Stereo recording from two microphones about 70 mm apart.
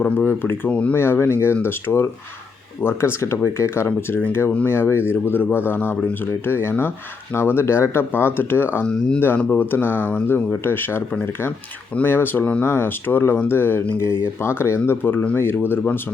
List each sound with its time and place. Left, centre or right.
0.3 s speech: left
0.7 s speech: centre
0.9 s speech: left